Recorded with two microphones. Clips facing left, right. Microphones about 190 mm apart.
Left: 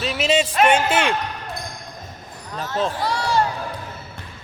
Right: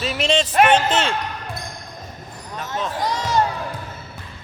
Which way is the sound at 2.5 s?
30° left (ahead or behind).